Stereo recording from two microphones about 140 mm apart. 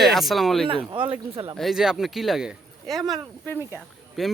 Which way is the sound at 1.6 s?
Centre (ahead or behind).